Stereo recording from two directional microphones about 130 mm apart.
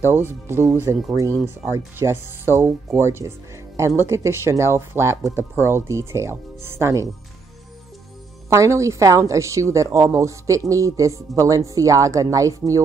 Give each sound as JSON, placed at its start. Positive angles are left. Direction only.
{"t": 0.0, "sound": "a woman's voice", "side_deg": -20}
{"t": 8.5, "sound": "a woman's voice", "side_deg": -25}